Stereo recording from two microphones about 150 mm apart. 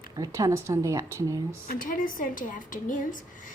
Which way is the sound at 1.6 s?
70° left (ahead or behind).